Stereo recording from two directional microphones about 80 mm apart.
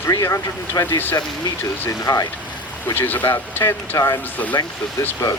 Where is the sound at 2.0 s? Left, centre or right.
Left.